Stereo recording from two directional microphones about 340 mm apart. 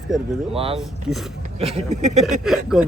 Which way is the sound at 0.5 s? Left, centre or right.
Centre.